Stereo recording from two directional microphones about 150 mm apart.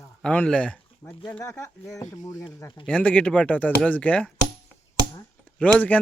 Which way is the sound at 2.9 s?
10° left (ahead or behind).